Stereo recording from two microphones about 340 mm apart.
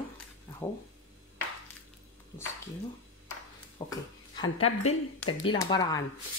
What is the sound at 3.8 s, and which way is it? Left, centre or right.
Speech, centre.